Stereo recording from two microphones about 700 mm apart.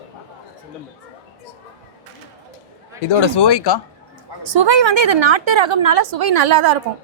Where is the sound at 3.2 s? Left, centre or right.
Left.